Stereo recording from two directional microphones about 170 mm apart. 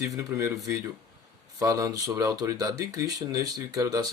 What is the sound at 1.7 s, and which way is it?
Speech, 20° right (ahead or behind).